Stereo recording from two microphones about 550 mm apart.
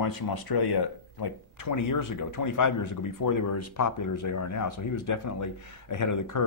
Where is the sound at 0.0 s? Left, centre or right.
Left.